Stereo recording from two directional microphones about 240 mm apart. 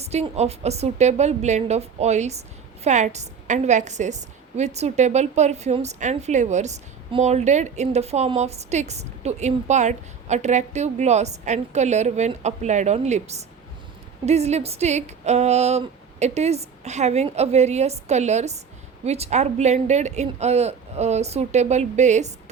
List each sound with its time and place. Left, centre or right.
0.0 s a woman's voice: right